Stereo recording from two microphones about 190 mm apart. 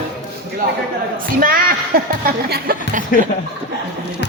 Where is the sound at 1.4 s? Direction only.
50° right (ahead or behind).